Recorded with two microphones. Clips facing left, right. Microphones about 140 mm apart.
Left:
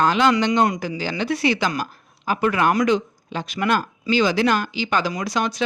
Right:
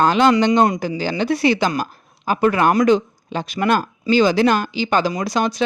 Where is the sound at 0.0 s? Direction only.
30° right (ahead or behind).